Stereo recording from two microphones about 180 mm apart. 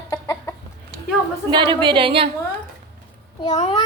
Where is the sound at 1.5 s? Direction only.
25° right (ahead or behind).